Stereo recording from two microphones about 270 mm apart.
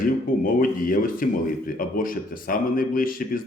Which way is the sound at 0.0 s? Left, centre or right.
Left.